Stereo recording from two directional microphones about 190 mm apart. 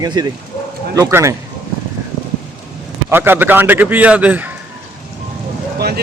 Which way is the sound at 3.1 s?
10° right (ahead or behind).